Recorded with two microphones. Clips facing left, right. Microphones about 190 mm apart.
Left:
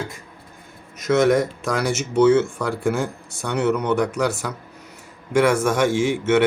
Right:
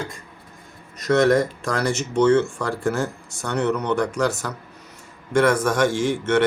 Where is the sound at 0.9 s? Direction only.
Centre (ahead or behind).